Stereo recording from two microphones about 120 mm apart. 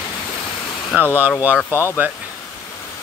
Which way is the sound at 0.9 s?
15° right (ahead or behind).